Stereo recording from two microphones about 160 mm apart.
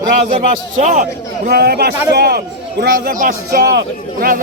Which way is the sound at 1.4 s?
80° right.